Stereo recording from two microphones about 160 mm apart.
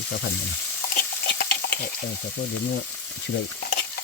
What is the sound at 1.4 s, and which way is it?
Water, 75° left (ahead or behind).